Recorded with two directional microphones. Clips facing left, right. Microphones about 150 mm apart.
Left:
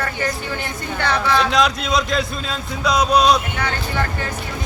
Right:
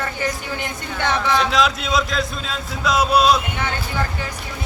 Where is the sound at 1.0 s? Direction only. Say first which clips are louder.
Left 1 dB; 20° right (ahead or behind).